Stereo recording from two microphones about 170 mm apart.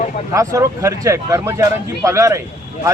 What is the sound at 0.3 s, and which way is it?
Speech, 20° right (ahead or behind).